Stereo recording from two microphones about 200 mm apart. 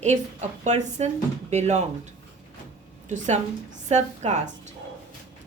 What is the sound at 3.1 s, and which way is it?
Speech, 35° right (ahead or behind).